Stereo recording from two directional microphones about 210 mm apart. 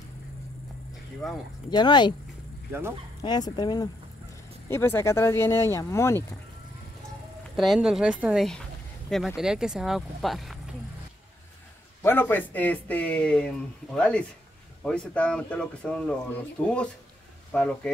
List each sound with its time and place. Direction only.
1.7 s speech: 20° left (ahead or behind)
3.2 s speech: 20° left (ahead or behind)
7.5 s speech: centre (ahead or behind)
12.0 s speech: 10° left (ahead or behind)